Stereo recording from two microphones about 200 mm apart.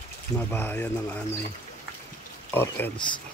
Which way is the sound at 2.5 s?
10° left (ahead or behind).